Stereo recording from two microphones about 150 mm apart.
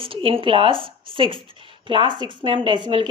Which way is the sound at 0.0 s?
35° right (ahead or behind).